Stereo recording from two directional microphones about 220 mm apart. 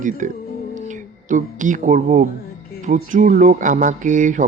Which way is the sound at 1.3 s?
35° right (ahead or behind).